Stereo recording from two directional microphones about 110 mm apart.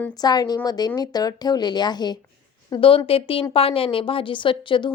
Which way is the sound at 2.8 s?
55° left (ahead or behind).